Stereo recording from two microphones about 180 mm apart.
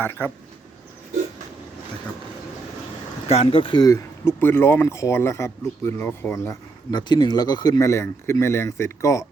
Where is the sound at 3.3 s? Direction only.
35° left (ahead or behind).